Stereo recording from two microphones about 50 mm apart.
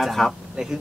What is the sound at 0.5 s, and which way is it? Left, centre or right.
Speech, centre.